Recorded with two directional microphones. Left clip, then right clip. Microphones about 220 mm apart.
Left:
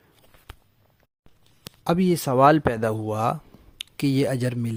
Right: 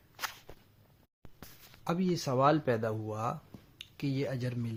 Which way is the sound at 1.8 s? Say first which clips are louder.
Left 11 dB; 45° left (ahead or behind).